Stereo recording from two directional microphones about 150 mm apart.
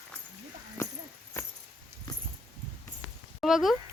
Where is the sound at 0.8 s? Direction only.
20° left (ahead or behind).